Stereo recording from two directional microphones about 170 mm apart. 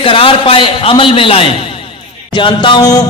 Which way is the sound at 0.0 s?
30° left (ahead or behind).